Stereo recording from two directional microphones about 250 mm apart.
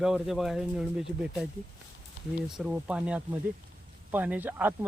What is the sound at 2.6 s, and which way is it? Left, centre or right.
Speech, centre.